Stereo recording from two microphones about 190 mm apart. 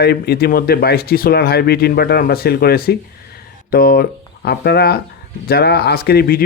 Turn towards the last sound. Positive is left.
turn(degrees=55)  # may be behind; listen again after turning